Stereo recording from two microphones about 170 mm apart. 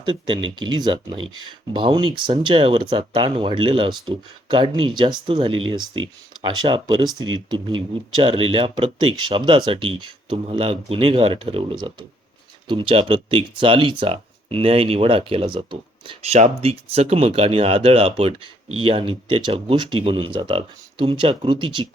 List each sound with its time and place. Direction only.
0.0 s speech: 30° right (ahead or behind)